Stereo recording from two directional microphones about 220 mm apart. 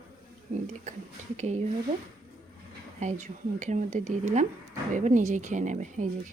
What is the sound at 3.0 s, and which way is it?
Speech, 30° right (ahead or behind).